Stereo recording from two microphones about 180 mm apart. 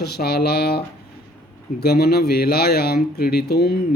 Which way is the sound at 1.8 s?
60° left (ahead or behind).